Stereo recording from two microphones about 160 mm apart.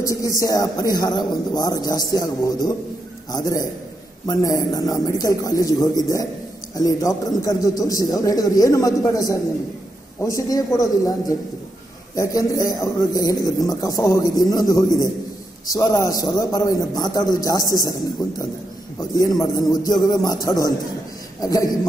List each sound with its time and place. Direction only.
0.0 s a man's voice: 20° left (ahead or behind)